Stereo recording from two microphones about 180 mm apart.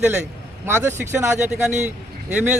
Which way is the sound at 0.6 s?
15° right (ahead or behind).